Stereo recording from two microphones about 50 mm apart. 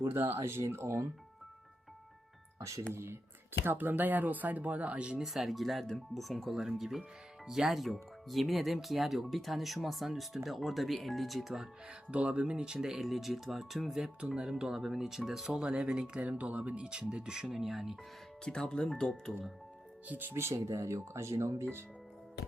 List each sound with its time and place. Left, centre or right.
0.0 s speech: right
0.3 s speech: right
2.9 s speech: right
3.6 s speech: right
5.2 s speech: centre
7.7 s speech: centre
12.1 s speech: right
13.0 s speech: centre
18.4 s speech: centre
20.1 s speech: right
20.3 s speech: right